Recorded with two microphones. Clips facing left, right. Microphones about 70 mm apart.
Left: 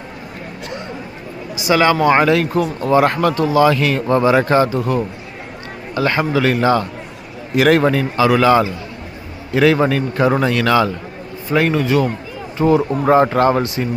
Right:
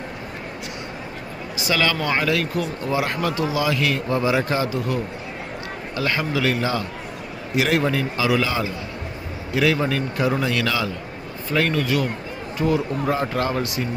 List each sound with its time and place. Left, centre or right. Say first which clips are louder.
1.6 s a man's voice: left 9 dB; left
11.5 s a man's voice: left 6 dB; left